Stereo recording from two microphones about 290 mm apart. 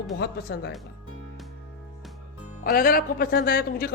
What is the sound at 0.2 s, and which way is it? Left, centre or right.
Speech, left.